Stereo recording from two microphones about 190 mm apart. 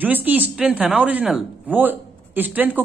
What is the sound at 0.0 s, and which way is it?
Speech, 10° right (ahead or behind).